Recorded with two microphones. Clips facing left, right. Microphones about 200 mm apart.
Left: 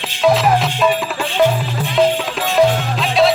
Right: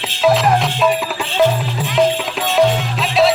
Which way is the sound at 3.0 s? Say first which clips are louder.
Even; centre (ahead or behind).